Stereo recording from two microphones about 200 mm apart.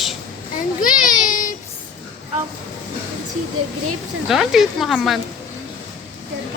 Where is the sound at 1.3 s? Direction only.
40° left (ahead or behind).